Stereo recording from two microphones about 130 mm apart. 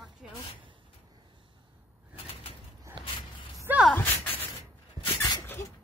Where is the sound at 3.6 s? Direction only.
10° right (ahead or behind).